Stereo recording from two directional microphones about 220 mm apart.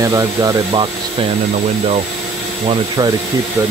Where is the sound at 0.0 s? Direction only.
15° right (ahead or behind).